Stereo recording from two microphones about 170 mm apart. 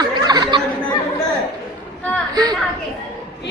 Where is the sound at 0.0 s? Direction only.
25° right (ahead or behind).